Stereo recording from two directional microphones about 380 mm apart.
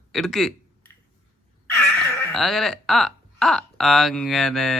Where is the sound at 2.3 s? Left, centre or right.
Centre.